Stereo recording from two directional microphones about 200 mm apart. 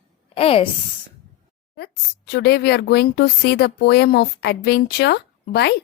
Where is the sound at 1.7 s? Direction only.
55° left (ahead or behind).